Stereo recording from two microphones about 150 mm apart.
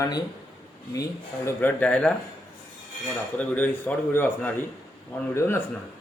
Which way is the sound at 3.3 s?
10° left (ahead or behind).